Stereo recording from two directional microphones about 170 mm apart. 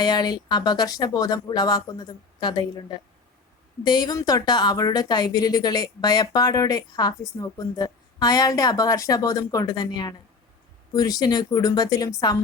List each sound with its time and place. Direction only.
0.0 s speech: 25° left (ahead or behind)
3.8 s speech: 25° left (ahead or behind)